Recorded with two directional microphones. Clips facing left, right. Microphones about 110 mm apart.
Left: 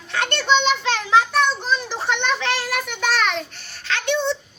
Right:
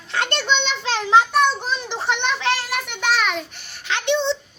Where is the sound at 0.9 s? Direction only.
25° right (ahead or behind).